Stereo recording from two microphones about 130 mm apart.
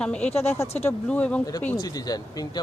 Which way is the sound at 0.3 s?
55° left (ahead or behind).